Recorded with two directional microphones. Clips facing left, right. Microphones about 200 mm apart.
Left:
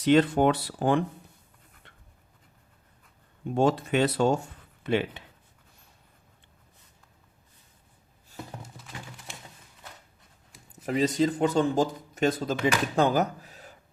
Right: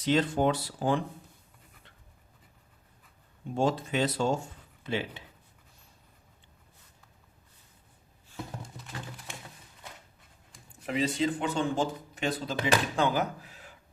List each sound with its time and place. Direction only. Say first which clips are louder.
0.0 s speech: left 5 dB; 60° left (ahead or behind)
3.5 s speech: left 4 dB; 60° left (ahead or behind)
8.6 s music: right 1 dB; centre (ahead or behind)
10.8 s speech: left 4 dB; 40° left (ahead or behind)